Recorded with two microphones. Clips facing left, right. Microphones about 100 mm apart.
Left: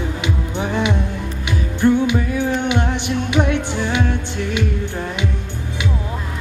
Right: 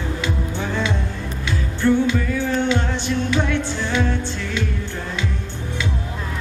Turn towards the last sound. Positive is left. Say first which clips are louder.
# left 3 dB
turn(degrees=15)  # may be behind; listen again after turning